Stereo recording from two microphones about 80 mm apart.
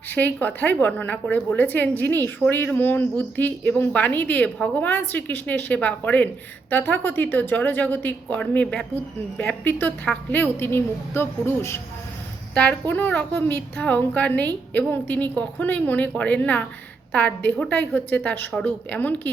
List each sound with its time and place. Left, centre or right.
0.1 s a woman's voice: left
8.6 s speech: centre
9.4 s a woman's voice: centre
12.9 s a woman's voice: centre